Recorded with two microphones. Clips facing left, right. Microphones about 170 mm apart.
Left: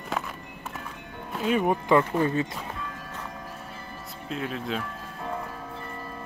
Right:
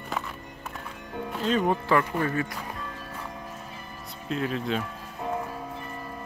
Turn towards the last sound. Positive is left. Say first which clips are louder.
# right 3 dB
turn(degrees=0)  # may be behind; listen again after turning